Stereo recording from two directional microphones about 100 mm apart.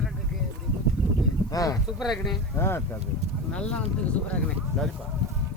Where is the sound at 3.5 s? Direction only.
10° left (ahead or behind).